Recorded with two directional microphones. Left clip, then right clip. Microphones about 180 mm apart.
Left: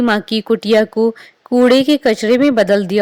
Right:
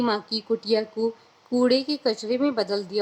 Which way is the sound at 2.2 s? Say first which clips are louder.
Left 12 dB; 35° left (ahead or behind).